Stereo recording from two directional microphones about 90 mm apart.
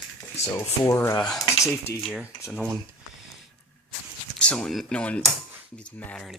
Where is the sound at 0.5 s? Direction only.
35° left (ahead or behind).